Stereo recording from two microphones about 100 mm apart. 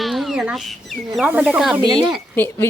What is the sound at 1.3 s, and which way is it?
Speech, 15° right (ahead or behind).